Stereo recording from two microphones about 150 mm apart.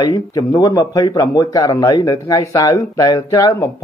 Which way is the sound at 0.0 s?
25° left (ahead or behind).